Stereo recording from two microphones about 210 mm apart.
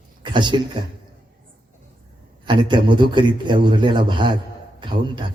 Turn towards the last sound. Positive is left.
turn(degrees=-20)  # may be behind; listen again after turning